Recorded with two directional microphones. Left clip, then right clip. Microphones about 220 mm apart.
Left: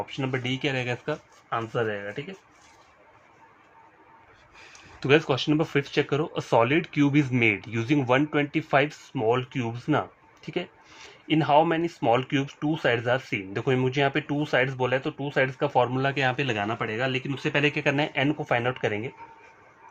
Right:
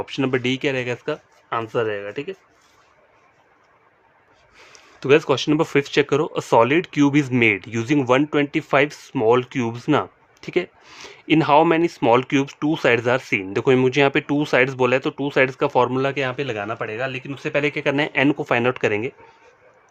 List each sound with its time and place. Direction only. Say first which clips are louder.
0.0 s speech: right 8 dB; 50° right (ahead or behind)
4.7 s speech: right 5 dB; 20° right (ahead or behind); by 19.1 s 40° right (ahead or behind)